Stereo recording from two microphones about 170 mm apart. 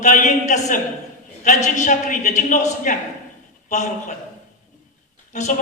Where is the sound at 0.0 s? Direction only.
45° left (ahead or behind).